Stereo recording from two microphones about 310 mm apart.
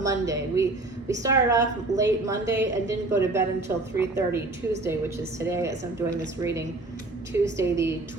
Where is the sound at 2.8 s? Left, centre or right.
Centre.